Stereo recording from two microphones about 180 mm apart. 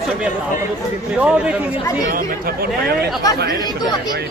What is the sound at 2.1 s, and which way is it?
Speech, 50° right (ahead or behind).